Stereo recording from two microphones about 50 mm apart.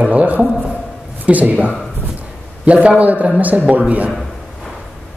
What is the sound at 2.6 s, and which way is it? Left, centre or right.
A man's voice, right.